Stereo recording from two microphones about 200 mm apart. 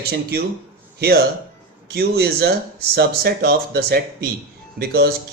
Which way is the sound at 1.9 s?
55° right (ahead or behind).